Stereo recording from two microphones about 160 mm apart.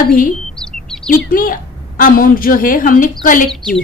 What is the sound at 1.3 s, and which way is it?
A woman's voice, 60° left (ahead or behind).